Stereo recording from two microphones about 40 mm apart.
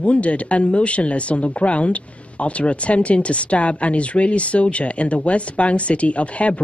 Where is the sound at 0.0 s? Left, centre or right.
Left.